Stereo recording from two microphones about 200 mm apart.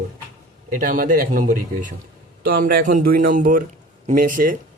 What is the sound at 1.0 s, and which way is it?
Speech, 45° right (ahead or behind).